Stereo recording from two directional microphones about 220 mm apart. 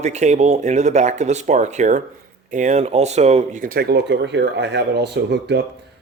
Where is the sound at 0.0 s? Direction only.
30° right (ahead or behind).